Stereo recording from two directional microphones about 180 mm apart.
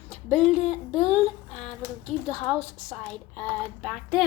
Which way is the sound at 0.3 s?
40° left (ahead or behind).